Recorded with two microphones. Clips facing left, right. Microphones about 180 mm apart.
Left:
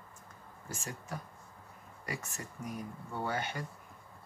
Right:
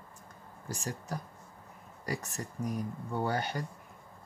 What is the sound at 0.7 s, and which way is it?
Speech, 35° right (ahead or behind).